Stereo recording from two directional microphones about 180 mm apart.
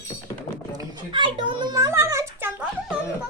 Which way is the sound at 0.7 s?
25° right (ahead or behind).